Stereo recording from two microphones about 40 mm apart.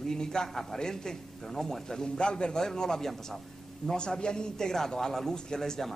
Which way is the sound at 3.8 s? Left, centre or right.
Left.